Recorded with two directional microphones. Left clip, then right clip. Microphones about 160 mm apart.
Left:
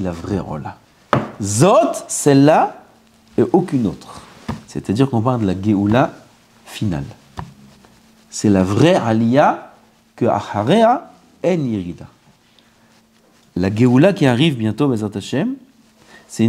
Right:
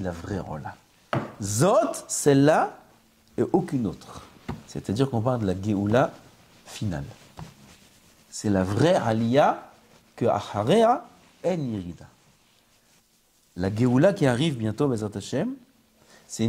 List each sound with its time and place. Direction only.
0.0 s speech: 5° right (ahead or behind)
6.6 s a sound: 5° right (ahead or behind)
8.3 s speech: 5° left (ahead or behind); by 11.0 s 15° right (ahead or behind)
11.4 s speech: centre (ahead or behind)
13.6 s speech: centre (ahead or behind)